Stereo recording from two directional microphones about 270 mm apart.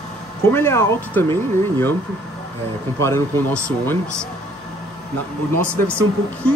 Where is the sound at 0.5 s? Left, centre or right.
Centre.